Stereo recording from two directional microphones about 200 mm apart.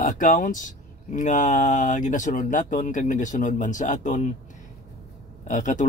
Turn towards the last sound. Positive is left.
turn(degrees=40)  # may be behind; listen again after turning